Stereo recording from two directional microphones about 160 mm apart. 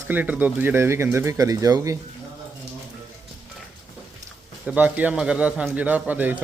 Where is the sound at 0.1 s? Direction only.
10° right (ahead or behind).